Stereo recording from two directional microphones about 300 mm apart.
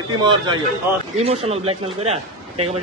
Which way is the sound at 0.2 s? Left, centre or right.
Centre.